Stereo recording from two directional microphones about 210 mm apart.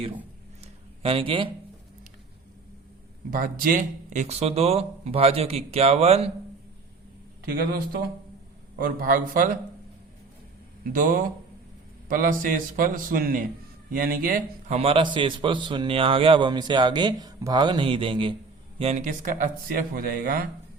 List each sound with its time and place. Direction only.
0.6 s a sound: 25° right (ahead or behind)
3.2 s a man's voice: 40° right (ahead or behind)
7.5 s speech: 45° right (ahead or behind)
10.9 s speech: 40° right (ahead or behind)
14.8 s a man's voice: 25° right (ahead or behind); by 20.4 s 40° right (ahead or behind)